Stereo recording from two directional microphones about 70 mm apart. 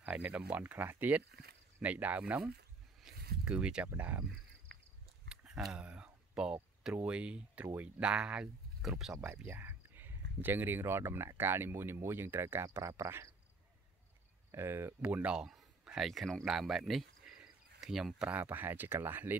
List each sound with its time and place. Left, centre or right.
0.0 s speech: centre
3.0 s a sound: centre
3.9 s speech: right
5.3 s speech: centre
9.2 s speech: right
14.5 s speech: right
15.1 s speech: centre
17.4 s cricket: centre
18.3 s speech: right